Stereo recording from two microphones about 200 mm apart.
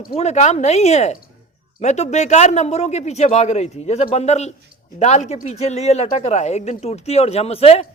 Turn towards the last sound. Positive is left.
turn(degrees=30)  # may be behind; listen again after turning